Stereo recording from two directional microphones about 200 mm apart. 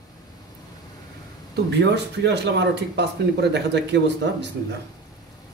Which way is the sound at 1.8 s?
60° right (ahead or behind).